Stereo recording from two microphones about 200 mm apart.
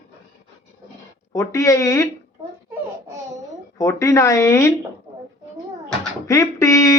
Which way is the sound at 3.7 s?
15° left (ahead or behind).